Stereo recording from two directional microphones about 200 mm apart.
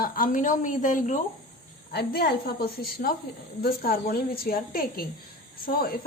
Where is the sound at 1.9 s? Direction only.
50° left (ahead or behind).